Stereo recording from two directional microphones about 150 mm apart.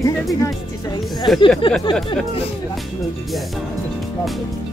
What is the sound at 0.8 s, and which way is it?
Speech, 25° left (ahead or behind).